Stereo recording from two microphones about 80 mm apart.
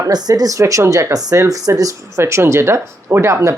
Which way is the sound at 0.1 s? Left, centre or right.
Right.